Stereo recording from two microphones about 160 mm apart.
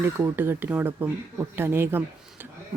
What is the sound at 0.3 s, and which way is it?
Speech, 10° right (ahead or behind).